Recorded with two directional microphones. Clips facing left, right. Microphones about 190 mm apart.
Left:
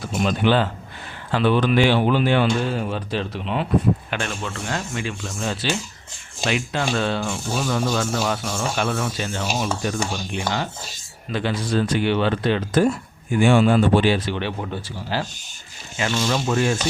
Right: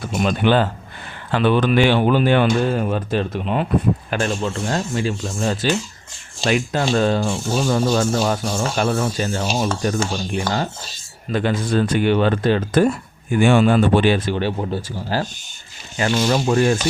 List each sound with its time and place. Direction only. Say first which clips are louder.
0.0 s speech: right 2 dB; 55° right (ahead or behind)
4.1 s speech: right 6 dB; 35° right (ahead or behind); by 12.9 s 55° right (ahead or behind)
13.3 s speech: right 2 dB; 65° right (ahead or behind); by 16.7 s 40° right (ahead or behind)